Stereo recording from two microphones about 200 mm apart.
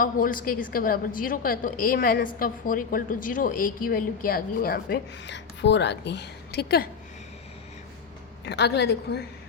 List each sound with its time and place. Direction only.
0.0 s a woman's voice: 45° left (ahead or behind)
8.4 s a woman's voice: 55° left (ahead or behind)